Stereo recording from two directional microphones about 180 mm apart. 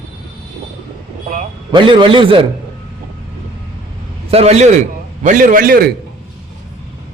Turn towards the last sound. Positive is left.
turn(degrees=-55)  # may be behind; listen again after turning